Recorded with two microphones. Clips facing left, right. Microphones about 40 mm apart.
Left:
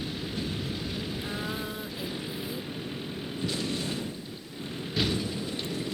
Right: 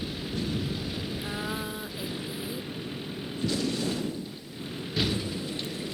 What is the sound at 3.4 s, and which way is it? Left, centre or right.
Vehicle, left.